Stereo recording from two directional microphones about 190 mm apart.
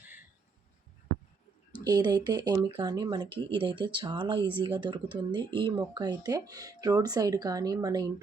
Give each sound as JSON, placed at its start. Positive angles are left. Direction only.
{"t": 1.8, "sound": "speech", "side_deg": -20}